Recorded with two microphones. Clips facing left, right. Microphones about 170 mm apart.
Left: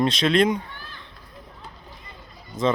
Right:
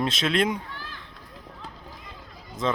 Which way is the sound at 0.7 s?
90° right.